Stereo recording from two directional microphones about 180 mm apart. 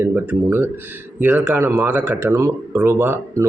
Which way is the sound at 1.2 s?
10° right (ahead or behind).